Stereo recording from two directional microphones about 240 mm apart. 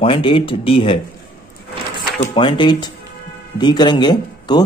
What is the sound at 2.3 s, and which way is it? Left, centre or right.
Speech, centre.